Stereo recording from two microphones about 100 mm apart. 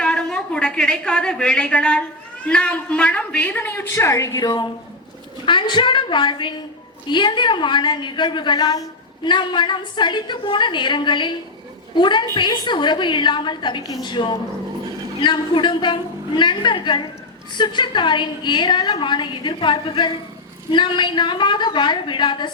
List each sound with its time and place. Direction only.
0.0 s a woman's voice: 10° left (ahead or behind); by 4.7 s 40° left (ahead or behind)
5.5 s a woman's voice: 55° left (ahead or behind)
9.2 s a woman's voice: 55° left (ahead or behind)